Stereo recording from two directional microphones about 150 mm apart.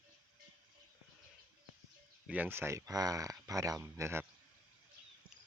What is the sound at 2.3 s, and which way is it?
Speech, 15° right (ahead or behind).